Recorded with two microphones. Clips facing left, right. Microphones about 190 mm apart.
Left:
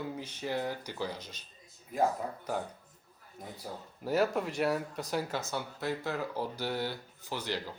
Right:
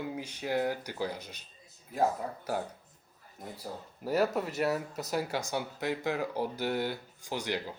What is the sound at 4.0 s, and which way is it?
Speech, centre (ahead or behind).